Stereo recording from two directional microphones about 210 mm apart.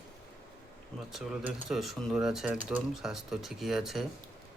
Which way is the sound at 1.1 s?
Centre (ahead or behind).